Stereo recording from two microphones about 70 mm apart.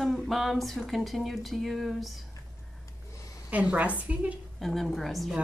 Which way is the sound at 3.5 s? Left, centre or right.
Centre.